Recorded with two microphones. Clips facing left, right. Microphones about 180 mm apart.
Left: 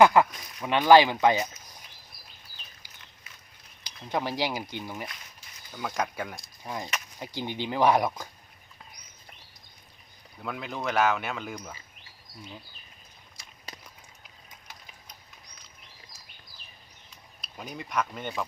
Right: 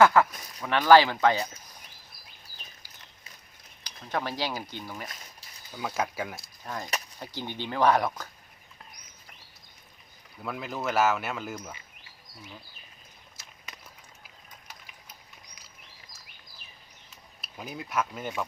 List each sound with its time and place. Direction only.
0.0 s speech: 15° left (ahead or behind)
3.8 s speech: 15° left (ahead or behind)
5.7 s speech: 5° right (ahead or behind)
7.2 s speech: 15° left (ahead or behind)
10.4 s speech: centre (ahead or behind)
13.4 s clip-clop: 5° right (ahead or behind)
17.4 s speech: 5° right (ahead or behind)